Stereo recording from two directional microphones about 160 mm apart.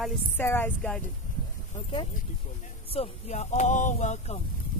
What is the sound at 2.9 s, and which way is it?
Speech, 45° left (ahead or behind).